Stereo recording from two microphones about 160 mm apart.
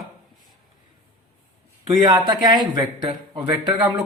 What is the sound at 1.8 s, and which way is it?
A man's voice, 30° right (ahead or behind).